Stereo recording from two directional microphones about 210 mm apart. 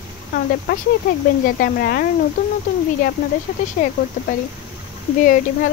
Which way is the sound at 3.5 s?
35° left (ahead or behind).